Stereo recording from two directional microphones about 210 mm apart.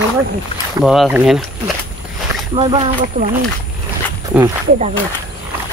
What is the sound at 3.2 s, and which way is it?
Speech, 30° right (ahead or behind).